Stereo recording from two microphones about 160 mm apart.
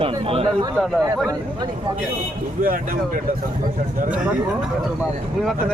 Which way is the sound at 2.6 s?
60° right (ahead or behind).